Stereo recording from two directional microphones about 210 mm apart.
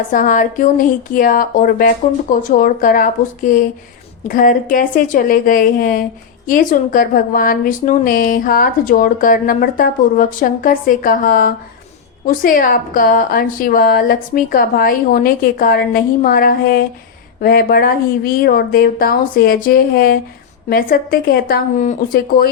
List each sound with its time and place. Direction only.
0.1 s a woman's voice: 40° left (ahead or behind)